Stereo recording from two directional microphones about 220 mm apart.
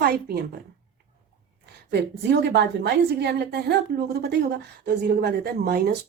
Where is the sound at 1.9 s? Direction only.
50° right (ahead or behind).